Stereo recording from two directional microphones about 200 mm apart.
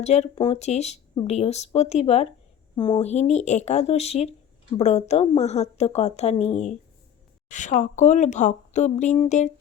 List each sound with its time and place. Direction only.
0.0 s a woman's voice: 35° left (ahead or behind)